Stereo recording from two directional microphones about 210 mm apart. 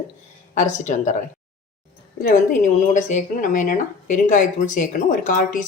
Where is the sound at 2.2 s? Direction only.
35° left (ahead or behind).